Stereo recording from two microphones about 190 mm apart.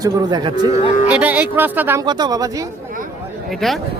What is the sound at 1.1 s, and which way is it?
Speech, 10° right (ahead or behind).